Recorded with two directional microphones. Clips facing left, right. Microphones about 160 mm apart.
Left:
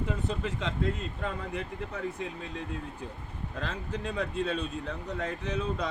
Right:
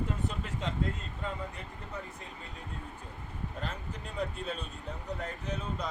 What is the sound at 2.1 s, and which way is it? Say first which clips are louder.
Speech: left 9 dB; 75° left (ahead or behind).